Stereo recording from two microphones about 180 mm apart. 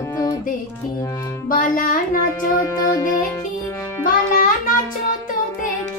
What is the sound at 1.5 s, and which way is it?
Music, 50° left (ahead or behind).